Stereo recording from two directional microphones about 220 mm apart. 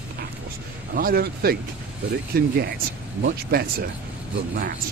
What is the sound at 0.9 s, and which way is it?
Speech, 45° right (ahead or behind).